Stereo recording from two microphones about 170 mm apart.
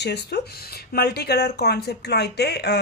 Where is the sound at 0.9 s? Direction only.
65° left (ahead or behind).